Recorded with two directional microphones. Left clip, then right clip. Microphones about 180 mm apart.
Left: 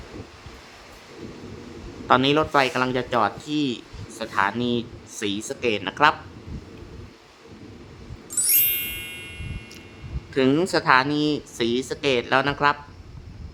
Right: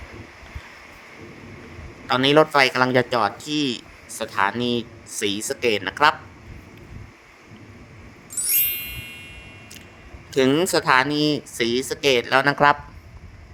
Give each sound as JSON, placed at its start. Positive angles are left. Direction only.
{"t": 2.0, "sound": "speech", "side_deg": -25}
{"t": 8.4, "sound": "music", "side_deg": 0}
{"t": 10.4, "sound": "speech", "side_deg": -30}